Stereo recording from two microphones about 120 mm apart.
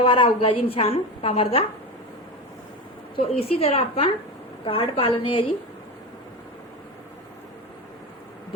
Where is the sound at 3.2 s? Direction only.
55° left (ahead or behind).